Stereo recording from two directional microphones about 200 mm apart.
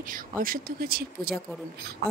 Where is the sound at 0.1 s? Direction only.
45° right (ahead or behind).